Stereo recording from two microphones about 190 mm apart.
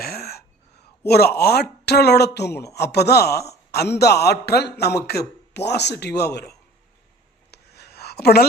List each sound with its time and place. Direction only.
0.0 s throat clearing: 55° left (ahead or behind)
1.0 s a man's voice: 55° left (ahead or behind)
7.5 s a sound: 60° left (ahead or behind)